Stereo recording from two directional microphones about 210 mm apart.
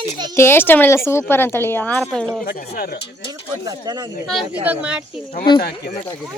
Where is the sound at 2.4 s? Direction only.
45° left (ahead or behind).